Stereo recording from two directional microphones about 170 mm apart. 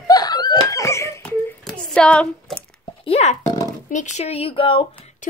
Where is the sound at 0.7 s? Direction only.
15° left (ahead or behind).